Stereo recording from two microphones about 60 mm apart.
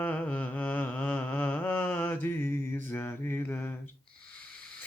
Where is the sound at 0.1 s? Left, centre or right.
Left.